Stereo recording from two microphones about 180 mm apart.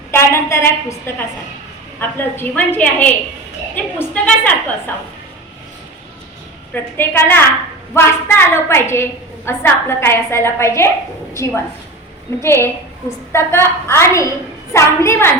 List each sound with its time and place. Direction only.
0.1 s a woman's voice: 15° left (ahead or behind)
6.9 s a woman's voice: 10° left (ahead or behind)